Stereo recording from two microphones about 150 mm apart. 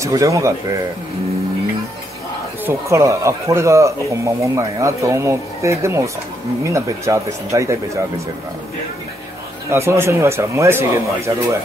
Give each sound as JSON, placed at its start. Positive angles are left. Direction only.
{"t": 0.0, "sound": "speech", "side_deg": -20}
{"t": 2.6, "sound": "speech", "side_deg": -20}
{"t": 9.7, "sound": "speech", "side_deg": -15}